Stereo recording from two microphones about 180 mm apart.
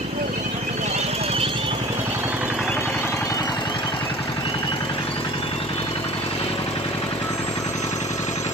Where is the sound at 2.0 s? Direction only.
10° right (ahead or behind).